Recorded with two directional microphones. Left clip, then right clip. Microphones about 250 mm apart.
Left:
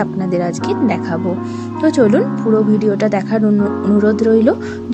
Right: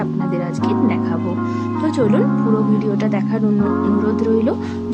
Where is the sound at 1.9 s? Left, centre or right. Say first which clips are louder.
Left 6 dB; centre.